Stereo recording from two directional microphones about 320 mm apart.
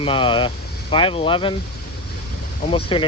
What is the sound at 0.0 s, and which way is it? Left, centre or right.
Speech, centre.